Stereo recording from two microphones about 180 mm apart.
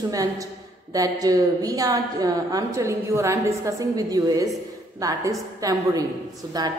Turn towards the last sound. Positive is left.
turn(degrees=-20)  # may be behind; listen again after turning